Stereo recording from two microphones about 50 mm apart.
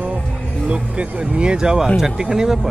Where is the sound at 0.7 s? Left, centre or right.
Right.